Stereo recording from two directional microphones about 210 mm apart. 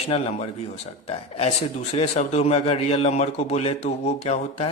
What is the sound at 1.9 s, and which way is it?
A man's voice, 30° left (ahead or behind).